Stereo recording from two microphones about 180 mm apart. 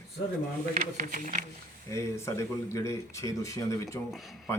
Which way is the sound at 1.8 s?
15° left (ahead or behind).